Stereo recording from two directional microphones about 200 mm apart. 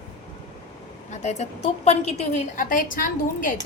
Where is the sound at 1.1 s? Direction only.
35° left (ahead or behind).